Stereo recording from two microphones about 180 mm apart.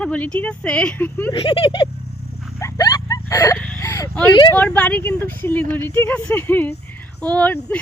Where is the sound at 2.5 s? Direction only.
20° left (ahead or behind).